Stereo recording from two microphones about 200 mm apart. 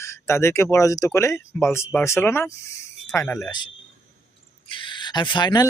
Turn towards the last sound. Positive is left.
turn(degrees=20)  # may be behind; listen again after turning